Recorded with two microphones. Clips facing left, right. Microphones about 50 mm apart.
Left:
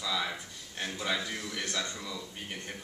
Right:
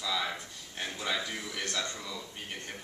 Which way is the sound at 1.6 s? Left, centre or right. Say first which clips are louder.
Right 1 dB; centre.